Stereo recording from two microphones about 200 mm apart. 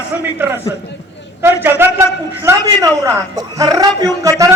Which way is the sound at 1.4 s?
10° right (ahead or behind).